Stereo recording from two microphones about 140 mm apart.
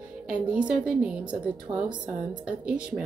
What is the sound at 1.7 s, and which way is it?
Speech, 30° right (ahead or behind).